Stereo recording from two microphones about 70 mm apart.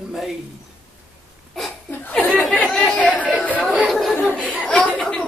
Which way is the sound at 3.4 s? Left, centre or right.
Centre.